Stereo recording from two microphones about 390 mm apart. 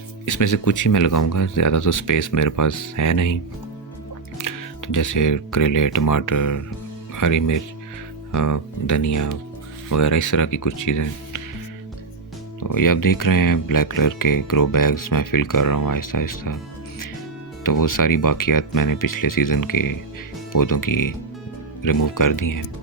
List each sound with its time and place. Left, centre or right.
0.3 s speech: left
4.4 s speech: left
12.5 s speech: left
17.6 s speech: left